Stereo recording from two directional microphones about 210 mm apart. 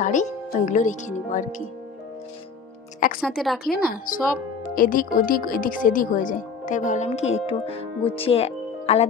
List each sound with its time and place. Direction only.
0.0 s speech: 35° left (ahead or behind)
3.2 s a woman's voice: centre (ahead or behind)
3.7 s speech: 45° left (ahead or behind); by 9.0 s 30° left (ahead or behind)